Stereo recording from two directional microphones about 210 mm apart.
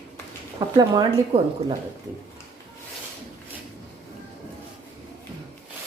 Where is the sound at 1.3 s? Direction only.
30° right (ahead or behind).